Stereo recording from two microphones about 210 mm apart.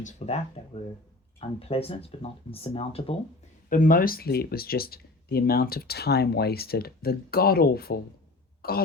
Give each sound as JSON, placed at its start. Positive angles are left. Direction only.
{"t": 0.0, "sound": "speech", "side_deg": 30}
{"t": 3.7, "sound": "speech", "side_deg": 40}